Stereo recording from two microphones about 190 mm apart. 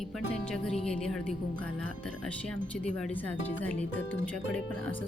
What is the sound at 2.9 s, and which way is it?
Speech, 5° left (ahead or behind).